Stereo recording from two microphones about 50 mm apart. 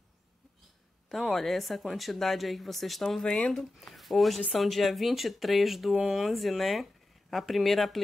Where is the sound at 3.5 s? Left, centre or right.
Centre.